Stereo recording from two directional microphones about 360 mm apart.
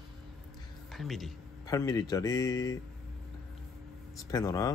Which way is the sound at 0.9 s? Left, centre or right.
Centre.